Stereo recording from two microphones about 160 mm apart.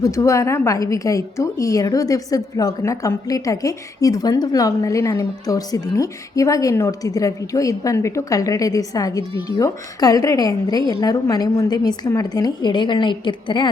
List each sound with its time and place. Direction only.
0.0 s a woman's voice: 20° left (ahead or behind)